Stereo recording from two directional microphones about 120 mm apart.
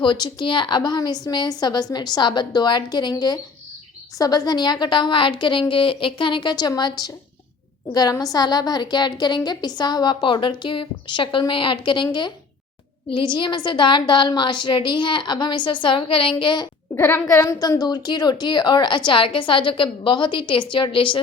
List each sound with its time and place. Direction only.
0.0 s a woman's voice: 40° left (ahead or behind)
13.1 s a woman's voice: 40° left (ahead or behind)
16.9 s a woman's voice: 20° left (ahead or behind); by 21.2 s 45° left (ahead or behind)